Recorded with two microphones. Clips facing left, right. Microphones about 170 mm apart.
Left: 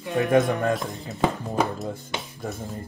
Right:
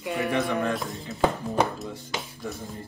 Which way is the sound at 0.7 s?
Centre (ahead or behind).